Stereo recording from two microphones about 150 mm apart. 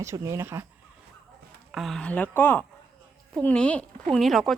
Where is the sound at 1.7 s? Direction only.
Centre (ahead or behind).